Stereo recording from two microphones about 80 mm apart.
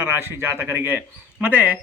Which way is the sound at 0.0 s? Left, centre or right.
Right.